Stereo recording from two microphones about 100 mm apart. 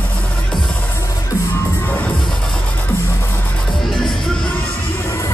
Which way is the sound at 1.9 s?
15° left (ahead or behind).